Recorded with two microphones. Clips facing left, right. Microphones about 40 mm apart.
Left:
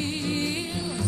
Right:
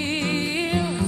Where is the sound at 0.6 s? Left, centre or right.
Right.